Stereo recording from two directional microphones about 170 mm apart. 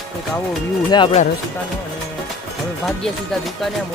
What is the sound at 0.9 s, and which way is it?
Speech, 30° left (ahead or behind).